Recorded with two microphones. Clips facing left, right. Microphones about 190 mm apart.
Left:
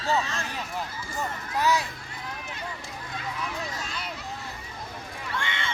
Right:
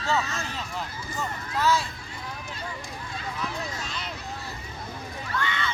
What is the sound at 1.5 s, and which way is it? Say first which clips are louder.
Speech: right 1 dB; 15° left (ahead or behind).